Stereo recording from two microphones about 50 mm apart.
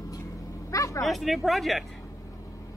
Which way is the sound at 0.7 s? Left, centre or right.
Left.